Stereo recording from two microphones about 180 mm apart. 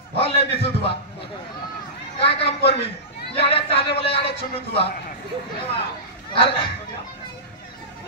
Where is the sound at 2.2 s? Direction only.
30° left (ahead or behind).